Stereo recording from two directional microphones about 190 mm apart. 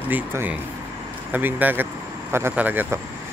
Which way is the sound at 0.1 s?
10° right (ahead or behind).